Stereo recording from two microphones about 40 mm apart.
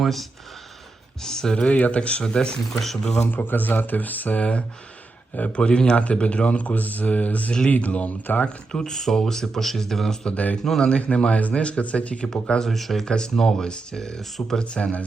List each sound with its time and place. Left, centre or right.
0.0 s speech: centre
1.2 s speech: centre
1.6 s speech: left; by 3.2 s centre
3.3 s speech: left
5.4 s speech: left
8.7 s speech: centre
10.3 s speech: left
10.6 s speech: centre
10.8 s speech: left
12.3 s speech: centre
12.6 s speech: centre
13.1 s speech: centre
14.2 s speech: centre
14.6 s speech: left